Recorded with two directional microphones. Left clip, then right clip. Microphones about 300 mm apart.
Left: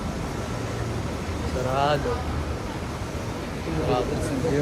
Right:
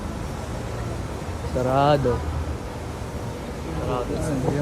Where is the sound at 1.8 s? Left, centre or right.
Right.